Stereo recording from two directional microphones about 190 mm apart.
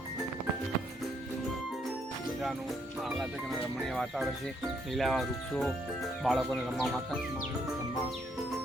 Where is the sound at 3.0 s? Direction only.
Centre (ahead or behind).